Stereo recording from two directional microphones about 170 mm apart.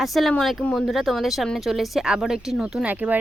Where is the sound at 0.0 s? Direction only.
Centre (ahead or behind).